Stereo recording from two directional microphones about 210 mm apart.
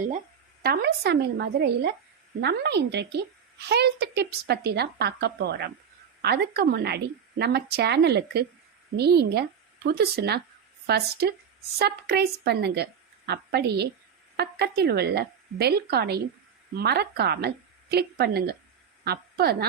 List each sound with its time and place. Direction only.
0.6 s a woman's voice: 50° right (ahead or behind)